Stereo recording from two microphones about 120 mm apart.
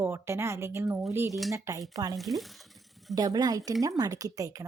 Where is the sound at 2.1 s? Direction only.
Centre (ahead or behind).